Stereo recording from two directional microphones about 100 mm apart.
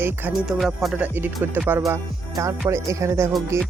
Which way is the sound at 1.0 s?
20° right (ahead or behind).